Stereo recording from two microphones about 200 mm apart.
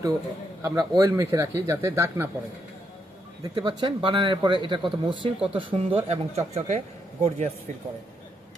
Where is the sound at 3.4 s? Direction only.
20° right (ahead or behind).